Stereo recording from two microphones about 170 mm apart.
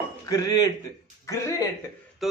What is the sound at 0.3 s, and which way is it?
A man's voice, 20° left (ahead or behind).